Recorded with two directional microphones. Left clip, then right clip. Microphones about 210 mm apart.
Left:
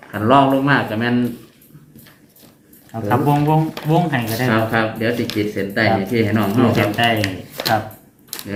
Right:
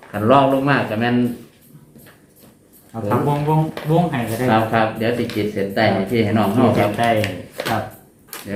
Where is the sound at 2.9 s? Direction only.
40° left (ahead or behind).